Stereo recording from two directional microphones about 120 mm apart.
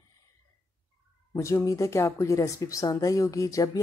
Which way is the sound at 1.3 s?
25° left (ahead or behind).